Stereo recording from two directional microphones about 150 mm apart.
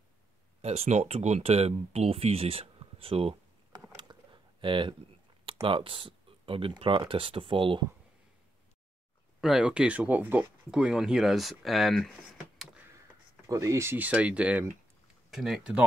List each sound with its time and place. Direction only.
0.6 s speech: 45° right (ahead or behind)
3.9 s a sound: 35° right (ahead or behind)
5.4 s speech: 35° right (ahead or behind)
9.4 s speech: 5° right (ahead or behind)
13.5 s speech: 20° right (ahead or behind); by 15.8 s 5° right (ahead or behind)